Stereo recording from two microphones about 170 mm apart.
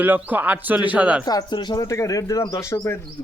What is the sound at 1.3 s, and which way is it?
Speech, 25° left (ahead or behind).